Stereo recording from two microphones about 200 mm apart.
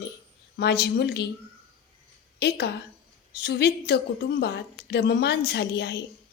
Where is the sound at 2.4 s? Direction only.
55° left (ahead or behind).